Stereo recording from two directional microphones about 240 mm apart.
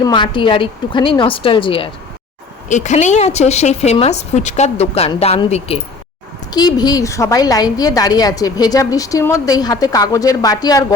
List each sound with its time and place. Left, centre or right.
0.0 s a woman's voice: centre